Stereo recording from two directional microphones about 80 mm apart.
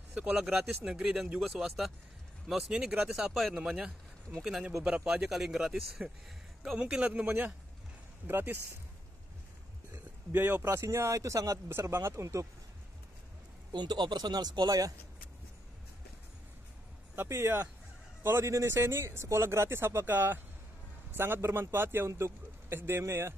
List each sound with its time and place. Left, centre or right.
0.1 s speech: centre; by 8.5 s right
10.3 s a man's voice: right
13.7 s speech: right
17.1 s a man's voice: right